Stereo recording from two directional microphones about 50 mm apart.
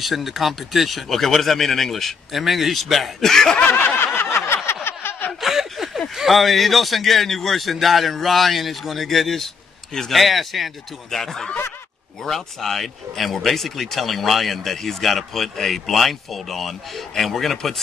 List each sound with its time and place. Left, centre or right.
0.0 s a man's voice: centre
3.5 s snicker: left
4.0 s a sound: left
4.8 s snicker: left
5.4 s a sound: centre
6.1 s a man's voice: centre